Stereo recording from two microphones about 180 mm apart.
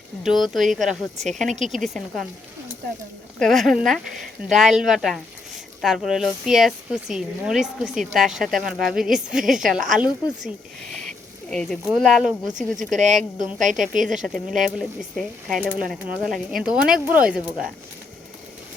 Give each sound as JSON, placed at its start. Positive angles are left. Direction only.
{"t": 0.2, "sound": "speech", "side_deg": 0}
{"t": 3.3, "sound": "speech", "side_deg": 0}
{"t": 11.5, "sound": "speech", "side_deg": 0}
{"t": 13.0, "sound": "speech", "side_deg": -40}
{"t": 14.8, "sound": "speech", "side_deg": 0}